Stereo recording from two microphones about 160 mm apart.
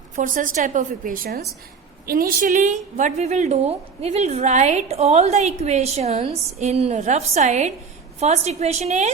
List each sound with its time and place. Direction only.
0.2 s a woman's voice: 55° right (ahead or behind); by 1.5 s 75° right (ahead or behind)
2.0 s a woman's voice: 65° right (ahead or behind); by 9.1 s 45° right (ahead or behind)